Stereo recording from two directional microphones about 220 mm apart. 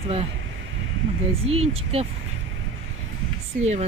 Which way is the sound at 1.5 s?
25° right (ahead or behind).